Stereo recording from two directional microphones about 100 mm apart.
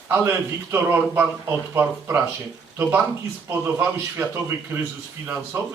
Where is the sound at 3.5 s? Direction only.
25° right (ahead or behind).